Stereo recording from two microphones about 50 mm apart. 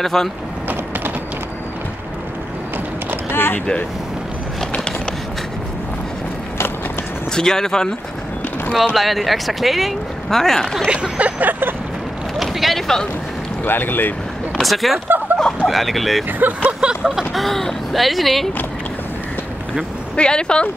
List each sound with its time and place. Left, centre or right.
0.0 s speech: centre
3.3 s a sound: left
7.3 s speech: centre
8.9 s speech: centre
10.9 s a sound: right
12.4 s vehicle: centre
13.7 s speech: left
14.6 s speech: centre
16.3 s speech: right
16.6 s vehicle: centre
17.2 s speech: centre
20.2 s speech: centre